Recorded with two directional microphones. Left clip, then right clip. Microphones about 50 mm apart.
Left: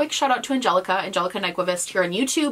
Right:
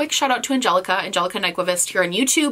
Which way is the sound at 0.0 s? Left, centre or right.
Right.